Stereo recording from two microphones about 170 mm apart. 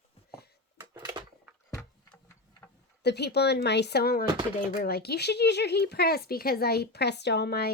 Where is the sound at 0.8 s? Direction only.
25° right (ahead or behind).